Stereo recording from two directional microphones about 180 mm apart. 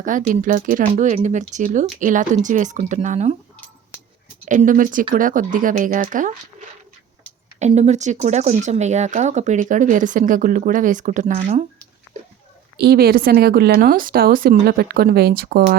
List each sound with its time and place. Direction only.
0.0 s speech: 45° right (ahead or behind)
4.4 s speech: 45° right (ahead or behind)
7.6 s speech: 40° right (ahead or behind)
12.7 s a woman's voice: 65° right (ahead or behind)